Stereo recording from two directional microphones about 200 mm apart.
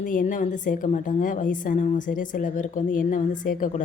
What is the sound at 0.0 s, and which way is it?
A woman's voice, 40° left (ahead or behind).